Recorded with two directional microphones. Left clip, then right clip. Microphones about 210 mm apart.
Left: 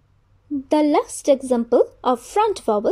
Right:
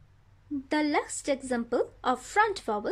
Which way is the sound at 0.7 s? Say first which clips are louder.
Left 10 dB; 15° left (ahead or behind).